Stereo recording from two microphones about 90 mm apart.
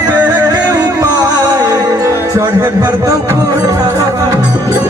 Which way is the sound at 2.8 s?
40° right (ahead or behind).